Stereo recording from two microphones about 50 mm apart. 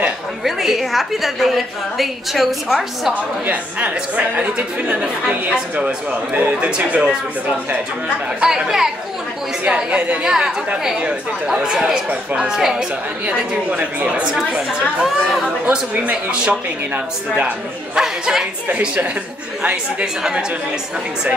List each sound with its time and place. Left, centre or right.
0.4 s a woman's voice: centre
3.1 s a woman's voice: right
6.3 s a man's voice: right
8.4 s a woman's voice: centre
9.7 s a woman's voice: right
10.2 s a woman's voice: centre
12.1 s a woman's voice: right
12.4 s a woman's voice: centre
13.2 s a woman's voice: right
14.2 s a woman's voice: centre
16.0 s a man's voice: right
17.9 s a woman's voice: centre
18.7 s a woman's voice: right